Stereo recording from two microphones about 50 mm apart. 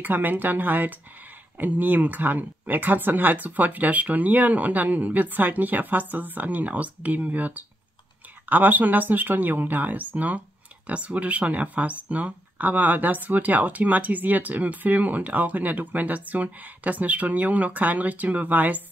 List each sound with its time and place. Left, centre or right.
0.0 s speech: right